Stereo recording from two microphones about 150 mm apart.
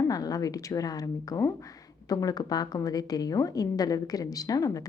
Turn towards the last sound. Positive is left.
turn(degrees=25)  # may be behind; listen again after turning